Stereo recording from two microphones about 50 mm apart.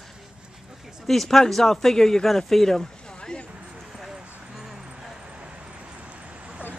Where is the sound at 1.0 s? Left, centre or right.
Centre.